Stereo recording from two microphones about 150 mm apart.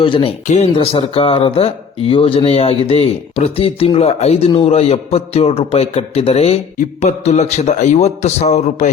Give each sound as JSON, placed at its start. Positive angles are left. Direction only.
{"t": 0.0, "sound": "speech", "side_deg": 35}
{"t": 0.4, "sound": "speech", "side_deg": 45}